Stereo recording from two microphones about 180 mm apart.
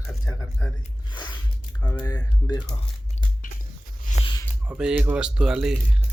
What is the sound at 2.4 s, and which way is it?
Speech, 25° left (ahead or behind).